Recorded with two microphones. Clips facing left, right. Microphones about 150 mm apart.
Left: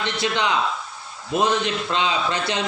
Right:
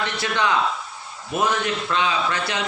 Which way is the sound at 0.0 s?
20° left (ahead or behind).